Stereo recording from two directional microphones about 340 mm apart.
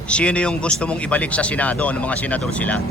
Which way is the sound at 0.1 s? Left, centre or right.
Centre.